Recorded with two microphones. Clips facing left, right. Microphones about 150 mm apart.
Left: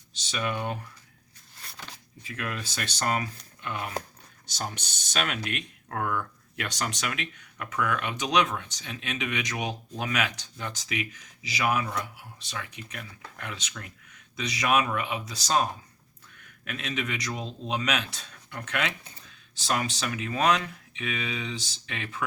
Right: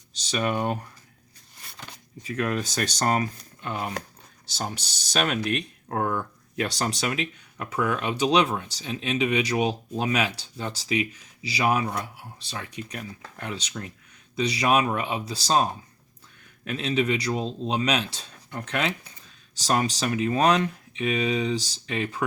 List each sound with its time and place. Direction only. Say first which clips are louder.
0.1 s speech: right 5 dB; 40° right (ahead or behind)
2.2 s speech: right 8 dB; 40° right (ahead or behind)